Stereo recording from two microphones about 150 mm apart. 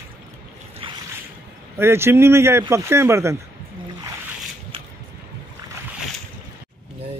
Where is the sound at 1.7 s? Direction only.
15° right (ahead or behind).